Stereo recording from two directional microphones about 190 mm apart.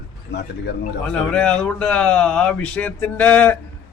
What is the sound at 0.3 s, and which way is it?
Speech, 65° left (ahead or behind).